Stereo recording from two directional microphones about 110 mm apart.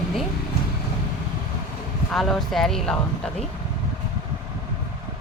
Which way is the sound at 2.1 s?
Centre (ahead or behind).